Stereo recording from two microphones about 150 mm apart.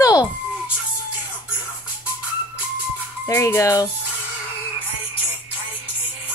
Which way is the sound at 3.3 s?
15° left (ahead or behind).